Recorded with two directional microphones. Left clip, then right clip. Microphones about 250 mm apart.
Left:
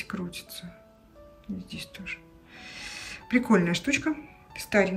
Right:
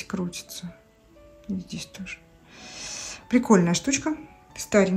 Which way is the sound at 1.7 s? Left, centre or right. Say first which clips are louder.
Even; centre.